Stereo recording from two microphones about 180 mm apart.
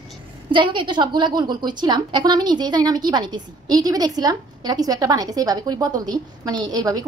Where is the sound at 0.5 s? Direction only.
25° right (ahead or behind).